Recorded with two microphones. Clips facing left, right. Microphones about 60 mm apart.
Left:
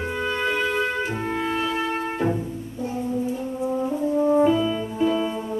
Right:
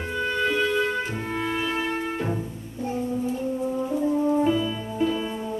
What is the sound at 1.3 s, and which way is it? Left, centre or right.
Music, centre.